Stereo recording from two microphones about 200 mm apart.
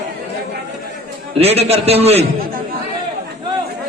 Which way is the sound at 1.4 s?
30° right (ahead or behind).